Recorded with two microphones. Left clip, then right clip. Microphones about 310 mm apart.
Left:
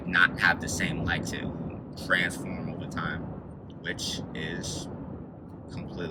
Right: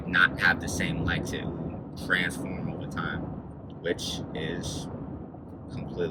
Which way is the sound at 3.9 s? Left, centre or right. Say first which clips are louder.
Even; centre.